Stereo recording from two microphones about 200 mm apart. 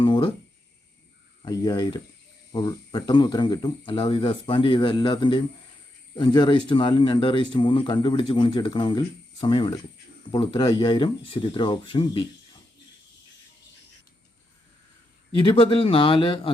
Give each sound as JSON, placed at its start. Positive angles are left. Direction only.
{"t": 0.0, "sound": "a sound", "side_deg": 25}
{"t": 1.4, "sound": "speech", "side_deg": 20}
{"t": 15.4, "sound": "speech", "side_deg": 25}